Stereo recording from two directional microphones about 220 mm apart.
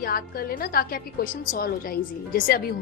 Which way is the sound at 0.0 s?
40° left (ahead or behind).